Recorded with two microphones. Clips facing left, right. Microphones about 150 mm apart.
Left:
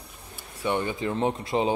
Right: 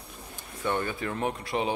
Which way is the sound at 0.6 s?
20° left (ahead or behind).